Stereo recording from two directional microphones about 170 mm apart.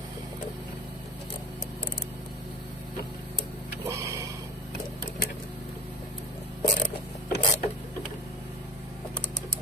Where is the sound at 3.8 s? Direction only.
20° right (ahead or behind).